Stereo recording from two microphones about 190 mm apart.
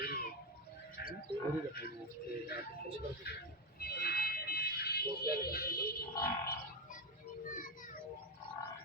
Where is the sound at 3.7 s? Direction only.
55° left (ahead or behind).